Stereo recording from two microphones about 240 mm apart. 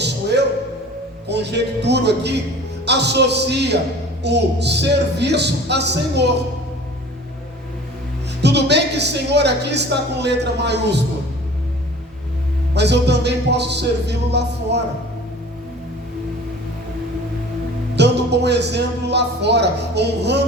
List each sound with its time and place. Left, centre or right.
0.0 s a sound: right
1.3 s a woman's voice: right
8.4 s a woman's voice: right
12.7 s a woman's voice: right
17.9 s a man's voice: right